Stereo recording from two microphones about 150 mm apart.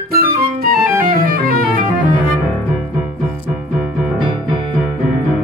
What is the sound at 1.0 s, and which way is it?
Music, 70° right (ahead or behind).